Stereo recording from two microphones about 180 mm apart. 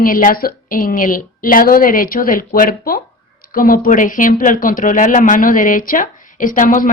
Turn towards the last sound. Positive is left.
turn(degrees=45)  # may be behind; listen again after turning